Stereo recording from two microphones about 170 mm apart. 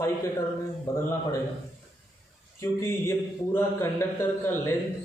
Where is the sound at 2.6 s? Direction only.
15° left (ahead or behind).